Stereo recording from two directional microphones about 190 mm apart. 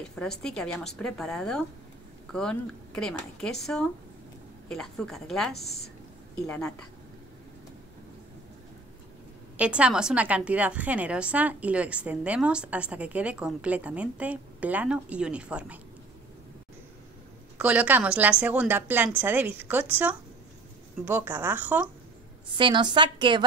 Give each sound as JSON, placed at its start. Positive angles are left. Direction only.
{"t": 0.0, "sound": "speech", "side_deg": 5}
{"t": 9.6, "sound": "a woman's voice", "side_deg": -5}
{"t": 17.6, "sound": "a woman's voice", "side_deg": -5}
{"t": 22.5, "sound": "a woman's voice", "side_deg": -25}